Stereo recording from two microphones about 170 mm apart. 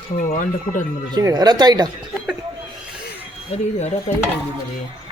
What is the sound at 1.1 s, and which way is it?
Speech, 25° right (ahead or behind).